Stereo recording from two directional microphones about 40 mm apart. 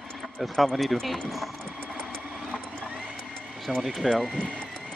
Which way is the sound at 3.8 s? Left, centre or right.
Centre.